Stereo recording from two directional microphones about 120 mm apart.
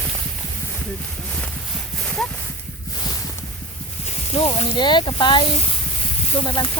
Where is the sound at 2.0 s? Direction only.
5° left (ahead or behind).